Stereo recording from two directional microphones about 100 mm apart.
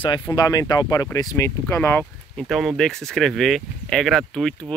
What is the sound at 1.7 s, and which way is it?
Speech, 20° left (ahead or behind).